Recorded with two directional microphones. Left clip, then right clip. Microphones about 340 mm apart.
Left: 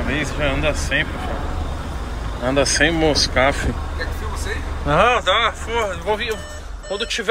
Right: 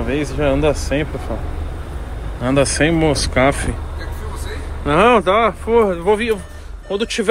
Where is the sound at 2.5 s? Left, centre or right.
Centre.